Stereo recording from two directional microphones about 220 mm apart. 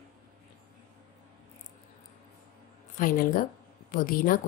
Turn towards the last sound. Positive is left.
turn(degrees=40)  # may be behind; listen again after turning